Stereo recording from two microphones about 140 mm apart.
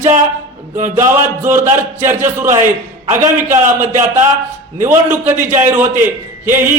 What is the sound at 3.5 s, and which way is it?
Speech, 60° right (ahead or behind).